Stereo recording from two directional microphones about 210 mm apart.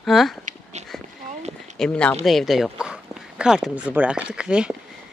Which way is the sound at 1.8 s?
5° left (ahead or behind).